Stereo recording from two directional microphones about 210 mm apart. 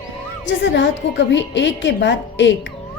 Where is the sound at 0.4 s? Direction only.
60° left (ahead or behind).